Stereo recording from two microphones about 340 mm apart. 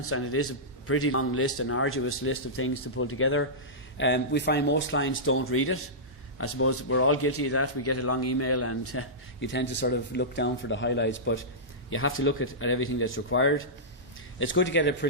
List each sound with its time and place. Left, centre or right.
0.0 s speech: left